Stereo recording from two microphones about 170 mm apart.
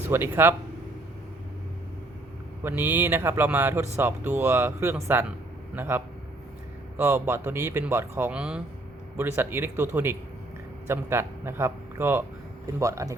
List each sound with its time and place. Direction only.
0.1 s speech: 15° right (ahead or behind)
2.6 s speech: 10° right (ahead or behind)
7.0 s speech: 10° right (ahead or behind)